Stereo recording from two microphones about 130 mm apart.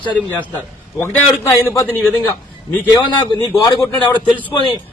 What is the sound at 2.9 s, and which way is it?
Speech, 35° left (ahead or behind).